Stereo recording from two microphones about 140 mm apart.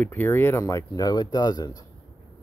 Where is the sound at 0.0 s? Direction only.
15° left (ahead or behind).